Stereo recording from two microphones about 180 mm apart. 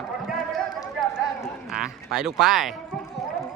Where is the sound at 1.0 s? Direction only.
Centre (ahead or behind).